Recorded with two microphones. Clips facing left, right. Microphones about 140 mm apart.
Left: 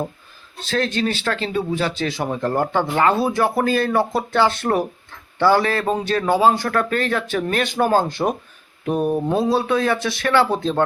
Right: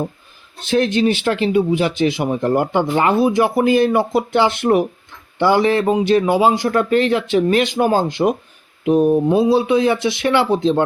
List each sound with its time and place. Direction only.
0.7 s speech: 15° right (ahead or behind)
7.5 s speech: 45° left (ahead or behind)
7.8 s speech: 15° right (ahead or behind)
8.9 s mantra: centre (ahead or behind)
9.2 s speech: 10° right (ahead or behind)